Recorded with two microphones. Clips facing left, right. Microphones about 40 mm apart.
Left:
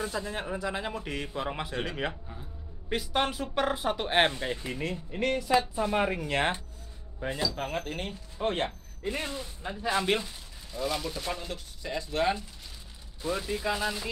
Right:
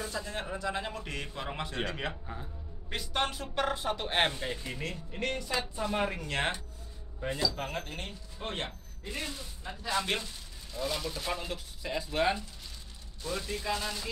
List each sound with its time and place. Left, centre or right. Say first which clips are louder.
0.1 s speech: left 3 dB; centre
9.0 s a man's voice: left 5 dB; left
10.0 s speech: left 5 dB; centre
13.2 s speech: left 5 dB; centre